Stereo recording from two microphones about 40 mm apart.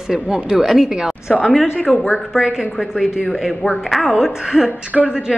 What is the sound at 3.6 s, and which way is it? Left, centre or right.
Speech, centre.